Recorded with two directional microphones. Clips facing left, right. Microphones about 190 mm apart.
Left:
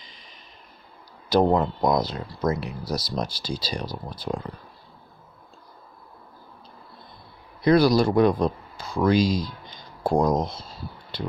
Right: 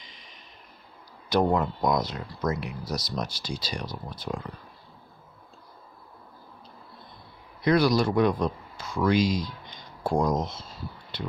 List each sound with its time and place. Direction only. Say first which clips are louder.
0.0 s a sound: left 1 dB; 35° left (ahead or behind)
1.3 s speech: left 4 dB; 30° left (ahead or behind)
7.6 s speech: left 4 dB; 35° left (ahead or behind)